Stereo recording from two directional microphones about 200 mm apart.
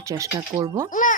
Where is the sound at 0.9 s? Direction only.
40° left (ahead or behind).